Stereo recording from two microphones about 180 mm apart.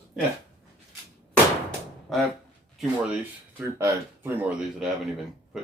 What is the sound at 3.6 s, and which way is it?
Speech, 10° right (ahead or behind).